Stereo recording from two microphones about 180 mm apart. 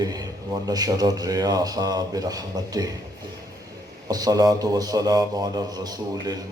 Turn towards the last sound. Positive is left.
turn(degrees=-20)  # may be behind; listen again after turning